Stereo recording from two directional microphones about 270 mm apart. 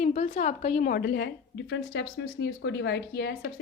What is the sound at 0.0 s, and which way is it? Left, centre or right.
A woman's voice, left.